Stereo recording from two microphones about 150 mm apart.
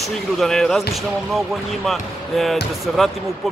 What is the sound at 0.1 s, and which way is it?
Speech, 5° left (ahead or behind).